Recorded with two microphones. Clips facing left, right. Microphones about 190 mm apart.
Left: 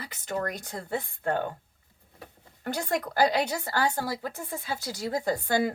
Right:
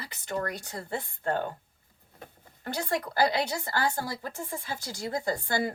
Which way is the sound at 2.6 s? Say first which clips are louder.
Left 2 dB; 50° left (ahead or behind).